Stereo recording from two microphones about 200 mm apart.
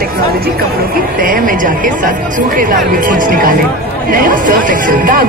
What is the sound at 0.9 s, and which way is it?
Speech, 45° right (ahead or behind).